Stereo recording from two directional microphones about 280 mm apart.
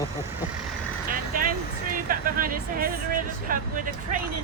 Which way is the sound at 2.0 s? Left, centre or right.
Right.